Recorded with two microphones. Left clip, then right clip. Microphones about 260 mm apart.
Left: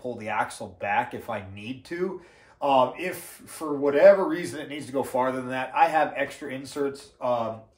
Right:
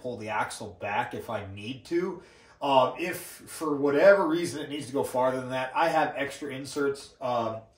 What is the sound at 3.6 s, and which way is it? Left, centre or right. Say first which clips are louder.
A man's voice: left 3 dB; centre.